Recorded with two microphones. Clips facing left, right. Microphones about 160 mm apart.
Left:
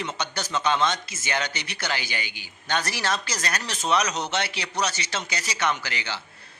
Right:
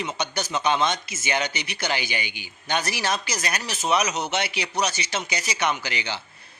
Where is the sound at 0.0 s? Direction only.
10° right (ahead or behind).